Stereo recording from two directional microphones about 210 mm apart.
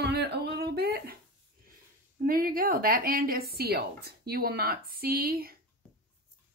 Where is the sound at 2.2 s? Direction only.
45° right (ahead or behind).